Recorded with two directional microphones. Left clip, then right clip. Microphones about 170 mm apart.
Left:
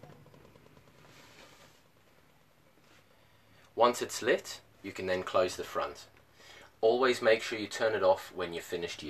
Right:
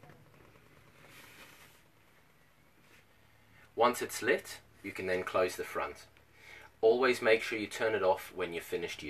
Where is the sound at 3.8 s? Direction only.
70° left (ahead or behind).